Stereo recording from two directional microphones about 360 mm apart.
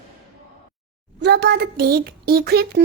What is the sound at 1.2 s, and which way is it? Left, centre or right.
Speech, right.